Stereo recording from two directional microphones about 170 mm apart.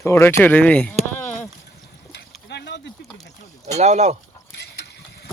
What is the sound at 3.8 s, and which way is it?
Speech, 45° right (ahead or behind).